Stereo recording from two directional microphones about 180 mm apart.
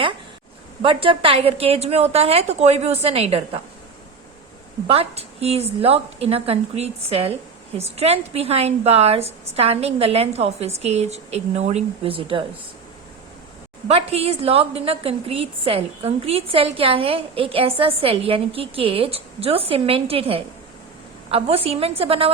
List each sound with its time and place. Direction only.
0.8 s a woman's voice: 30° right (ahead or behind)
4.9 s a woman's voice: 35° right (ahead or behind)
13.8 s a woman's voice: 35° right (ahead or behind)